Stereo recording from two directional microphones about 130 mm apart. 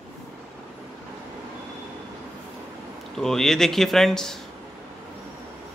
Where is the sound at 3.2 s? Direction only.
5° left (ahead or behind).